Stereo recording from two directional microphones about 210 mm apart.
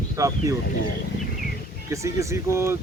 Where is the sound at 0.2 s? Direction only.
15° right (ahead or behind).